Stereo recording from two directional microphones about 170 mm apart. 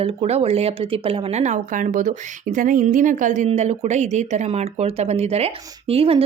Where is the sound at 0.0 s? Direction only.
35° right (ahead or behind).